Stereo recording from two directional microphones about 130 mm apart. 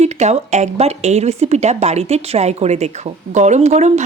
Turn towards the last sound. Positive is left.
turn(degrees=-60)  # may be behind; listen again after turning